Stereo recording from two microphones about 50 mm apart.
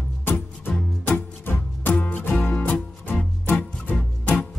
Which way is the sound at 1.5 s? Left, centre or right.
Left.